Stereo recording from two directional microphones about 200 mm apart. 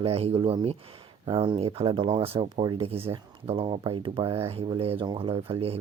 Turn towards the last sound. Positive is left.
turn(degrees=-30)  # may be behind; listen again after turning